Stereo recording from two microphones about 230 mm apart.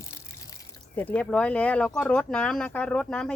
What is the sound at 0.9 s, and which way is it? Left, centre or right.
Speech, centre.